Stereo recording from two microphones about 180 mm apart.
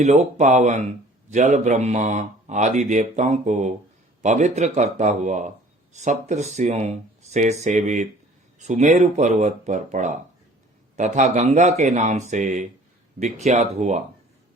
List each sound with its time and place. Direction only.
0.0 s speech: 40° right (ahead or behind)